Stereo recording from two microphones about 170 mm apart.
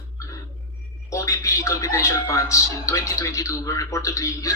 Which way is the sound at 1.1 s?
20° left (ahead or behind).